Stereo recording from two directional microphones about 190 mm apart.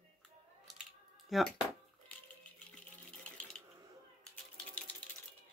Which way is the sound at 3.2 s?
5° left (ahead or behind).